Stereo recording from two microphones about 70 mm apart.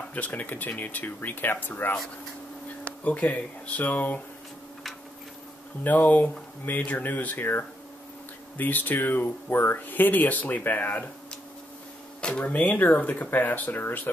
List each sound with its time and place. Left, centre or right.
0.1 s speech: left
2.8 s speech: centre
5.9 s speech: left
12.2 s speech: centre